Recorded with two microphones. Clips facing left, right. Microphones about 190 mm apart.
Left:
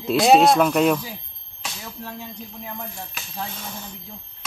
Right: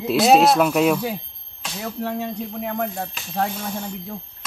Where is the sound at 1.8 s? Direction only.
65° right (ahead or behind).